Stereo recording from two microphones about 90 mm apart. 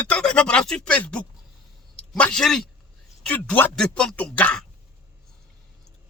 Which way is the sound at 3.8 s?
10° left (ahead or behind).